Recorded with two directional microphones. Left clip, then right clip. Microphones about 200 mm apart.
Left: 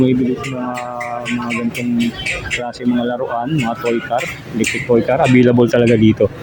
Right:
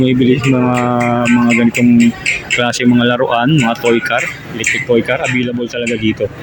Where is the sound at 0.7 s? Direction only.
30° right (ahead or behind).